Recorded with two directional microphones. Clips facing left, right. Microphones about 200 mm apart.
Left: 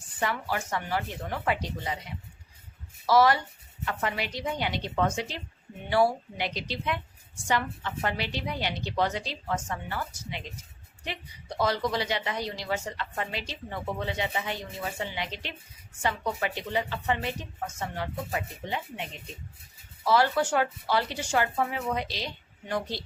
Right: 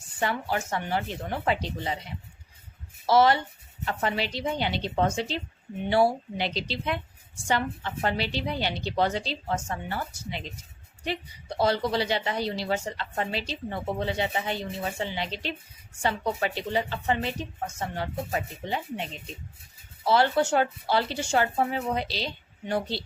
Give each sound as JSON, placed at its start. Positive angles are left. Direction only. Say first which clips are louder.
{"t": 0.2, "sound": "speech", "louder": "right 2 dB", "side_deg": -25}
{"t": 3.1, "sound": "a woman's voice", "louder": "right 1 dB", "side_deg": -25}
{"t": 20.1, "sound": "a woman's voice", "louder": "right 2 dB", "side_deg": -30}